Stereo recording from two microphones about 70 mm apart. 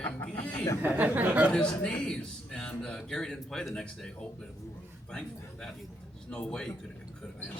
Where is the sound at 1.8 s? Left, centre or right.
Centre.